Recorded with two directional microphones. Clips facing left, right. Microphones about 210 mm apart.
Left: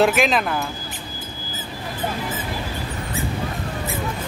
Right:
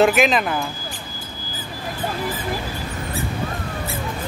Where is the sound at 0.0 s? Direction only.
Centre (ahead or behind).